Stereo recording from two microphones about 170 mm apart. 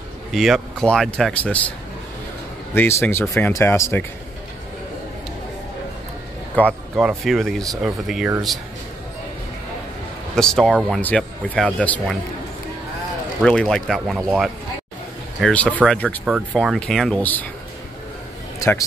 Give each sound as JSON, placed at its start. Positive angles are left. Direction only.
{"t": 0.3, "sound": "speech", "side_deg": 0}
{"t": 2.7, "sound": "speech", "side_deg": 15}
{"t": 6.6, "sound": "speech", "side_deg": 10}
{"t": 7.0, "sound": "speech", "side_deg": 0}
{"t": 10.3, "sound": "speech", "side_deg": 5}
{"t": 13.4, "sound": "speech", "side_deg": 5}
{"t": 15.4, "sound": "speech", "side_deg": 10}
{"t": 16.3, "sound": "speech", "side_deg": -5}
{"t": 18.6, "sound": "speech", "side_deg": 20}